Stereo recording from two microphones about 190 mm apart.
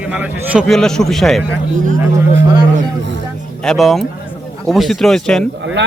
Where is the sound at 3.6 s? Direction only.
Centre (ahead or behind).